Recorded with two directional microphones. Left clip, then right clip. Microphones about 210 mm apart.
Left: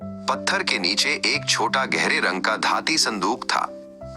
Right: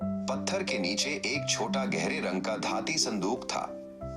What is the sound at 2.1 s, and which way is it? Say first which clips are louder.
Speech: left 11 dB; 40° left (ahead or behind).